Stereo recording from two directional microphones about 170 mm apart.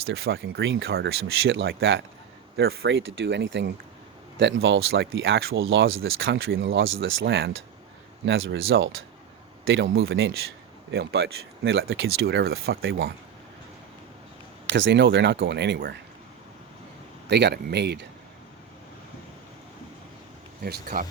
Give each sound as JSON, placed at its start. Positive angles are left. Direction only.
{"t": 0.1, "sound": "speech", "side_deg": -70}
{"t": 2.6, "sound": "speech", "side_deg": -75}
{"t": 4.9, "sound": "speech", "side_deg": -75}
{"t": 14.7, "sound": "speech", "side_deg": -90}
{"t": 17.2, "sound": "speech", "side_deg": -80}
{"t": 20.7, "sound": "speech", "side_deg": -65}